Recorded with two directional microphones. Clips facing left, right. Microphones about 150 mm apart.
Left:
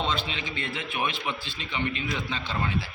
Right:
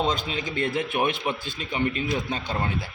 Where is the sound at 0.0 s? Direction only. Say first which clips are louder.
Right 4 dB; 40° right (ahead or behind).